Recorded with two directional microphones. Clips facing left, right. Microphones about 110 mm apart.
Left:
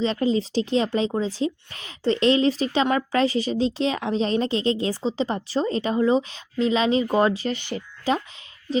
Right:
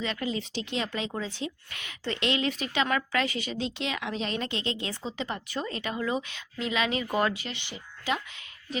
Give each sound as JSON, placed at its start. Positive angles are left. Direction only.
{"t": 0.0, "sound": "speech", "side_deg": 30}